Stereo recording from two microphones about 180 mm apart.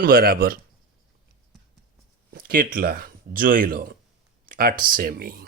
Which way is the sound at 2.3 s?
55° right (ahead or behind).